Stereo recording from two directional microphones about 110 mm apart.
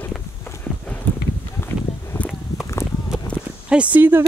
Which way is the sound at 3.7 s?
10° right (ahead or behind).